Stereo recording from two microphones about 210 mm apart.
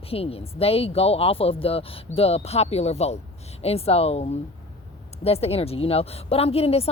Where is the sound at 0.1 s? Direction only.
25° left (ahead or behind).